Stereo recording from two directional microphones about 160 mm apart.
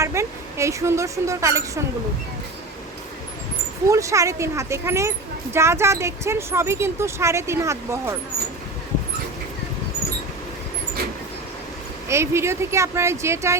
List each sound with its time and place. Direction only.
0.0 s a woman's voice: 15° right (ahead or behind)
3.8 s a woman's voice: 20° right (ahead or behind)
12.0 s speech: 15° right (ahead or behind)